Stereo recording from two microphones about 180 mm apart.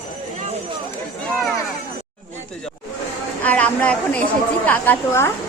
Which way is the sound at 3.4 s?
10° left (ahead or behind).